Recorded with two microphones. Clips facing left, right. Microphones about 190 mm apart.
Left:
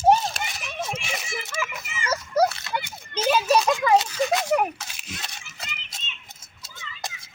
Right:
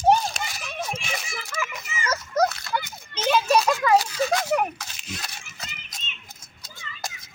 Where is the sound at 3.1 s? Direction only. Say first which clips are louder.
Even; 10° left (ahead or behind).